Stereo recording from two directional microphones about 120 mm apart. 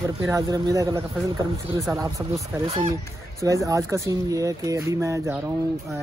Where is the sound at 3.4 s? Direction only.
25° right (ahead or behind).